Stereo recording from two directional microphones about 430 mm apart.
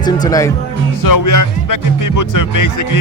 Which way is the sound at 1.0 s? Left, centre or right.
Left.